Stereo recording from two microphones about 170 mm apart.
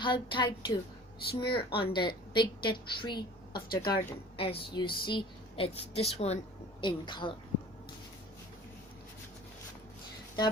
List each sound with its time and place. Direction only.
0.0 s a woman's voice: 30° left (ahead or behind)